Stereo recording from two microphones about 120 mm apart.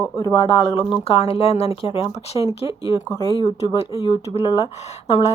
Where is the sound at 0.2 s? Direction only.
30° left (ahead or behind).